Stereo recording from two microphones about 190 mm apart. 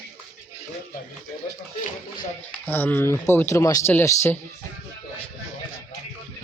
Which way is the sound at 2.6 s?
10° left (ahead or behind).